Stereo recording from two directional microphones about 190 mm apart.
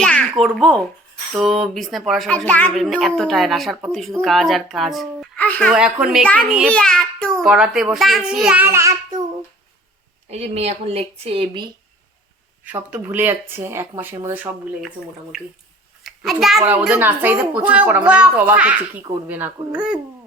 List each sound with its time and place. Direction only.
0.0 s a child's voice: centre (ahead or behind)
5.7 s a child's voice: 5° right (ahead or behind)
10.2 s a woman's voice: 35° right (ahead or behind)
12.6 s a child's voice: 10° right (ahead or behind)